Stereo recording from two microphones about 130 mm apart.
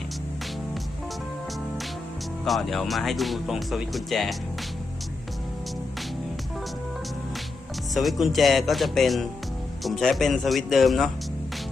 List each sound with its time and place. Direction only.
2.4 s speech: centre (ahead or behind)
7.9 s speech: centre (ahead or behind)